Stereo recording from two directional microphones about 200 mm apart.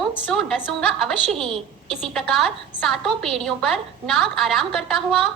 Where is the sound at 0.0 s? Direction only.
Centre (ahead or behind).